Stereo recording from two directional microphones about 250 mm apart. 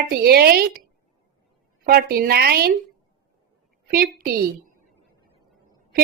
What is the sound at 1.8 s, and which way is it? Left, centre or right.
Speech, right.